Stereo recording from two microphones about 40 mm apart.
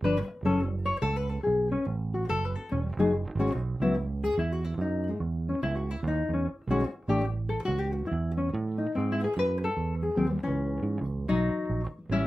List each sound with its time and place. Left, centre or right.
0.0 s music: centre
5.2 s guitar: centre
8.2 s music: centre
8.5 s music: centre
9.1 s guitar: centre
10.0 s music: centre